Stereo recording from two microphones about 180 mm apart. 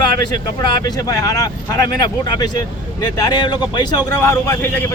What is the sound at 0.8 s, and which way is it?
Speech, 20° left (ahead or behind).